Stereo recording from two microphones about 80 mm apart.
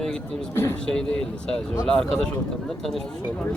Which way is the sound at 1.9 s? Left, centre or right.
Centre.